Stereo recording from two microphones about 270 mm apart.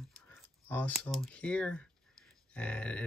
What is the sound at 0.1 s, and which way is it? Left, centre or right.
Speech, centre.